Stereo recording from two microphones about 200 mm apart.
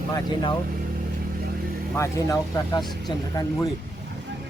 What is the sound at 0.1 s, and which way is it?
Speech, 20° left (ahead or behind).